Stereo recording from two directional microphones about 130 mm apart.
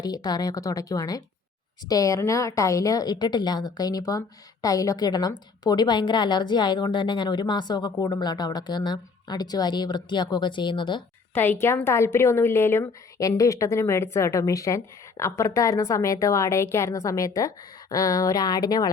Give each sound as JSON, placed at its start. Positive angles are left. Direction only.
{"t": 0.0, "sound": "a woman's voice", "side_deg": 30}
{"t": 11.6, "sound": "a woman's voice", "side_deg": 20}